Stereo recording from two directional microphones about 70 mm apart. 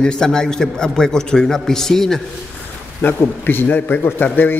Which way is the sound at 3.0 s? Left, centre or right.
Left.